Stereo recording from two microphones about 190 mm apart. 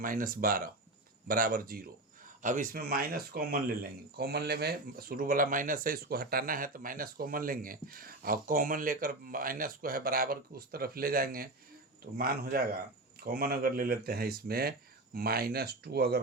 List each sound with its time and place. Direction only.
0.0 s speech: 45° right (ahead or behind)